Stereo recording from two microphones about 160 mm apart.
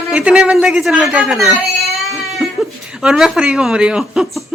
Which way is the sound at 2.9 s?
5° right (ahead or behind).